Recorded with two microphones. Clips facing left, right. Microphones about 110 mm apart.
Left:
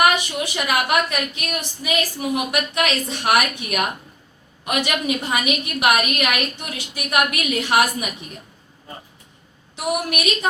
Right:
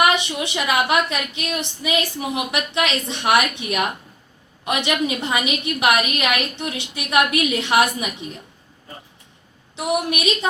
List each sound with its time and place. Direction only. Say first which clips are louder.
0.0 s a woman's voice: even; 25° right (ahead or behind)
9.7 s a woman's voice: right 1 dB; 25° right (ahead or behind)